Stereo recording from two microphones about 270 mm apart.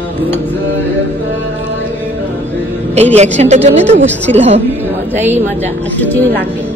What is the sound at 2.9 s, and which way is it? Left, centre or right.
Speech, right.